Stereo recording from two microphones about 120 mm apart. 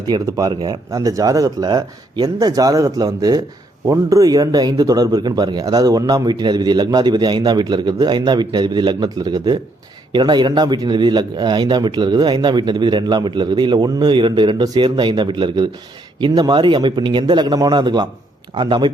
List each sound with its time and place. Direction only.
0.1 s speech: 30° right (ahead or behind)